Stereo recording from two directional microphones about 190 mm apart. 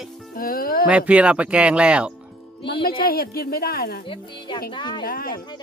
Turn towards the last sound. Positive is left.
turn(degrees=50)  # may be behind; listen again after turning